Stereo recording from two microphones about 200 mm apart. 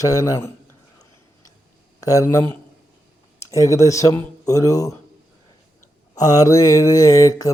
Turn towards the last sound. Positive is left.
turn(degrees=15)  # may be behind; listen again after turning